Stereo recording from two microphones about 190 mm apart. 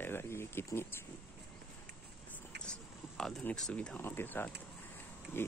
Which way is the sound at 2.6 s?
5° left (ahead or behind).